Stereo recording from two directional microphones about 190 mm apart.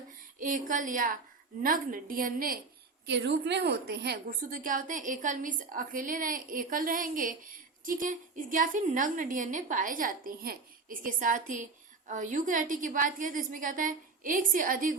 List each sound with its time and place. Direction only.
0.3 s a woman's voice: 45° right (ahead or behind)
3.1 s a woman's voice: 65° right (ahead or behind); by 14.9 s 45° right (ahead or behind)